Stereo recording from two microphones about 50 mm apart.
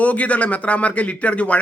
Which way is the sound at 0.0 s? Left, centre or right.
Left.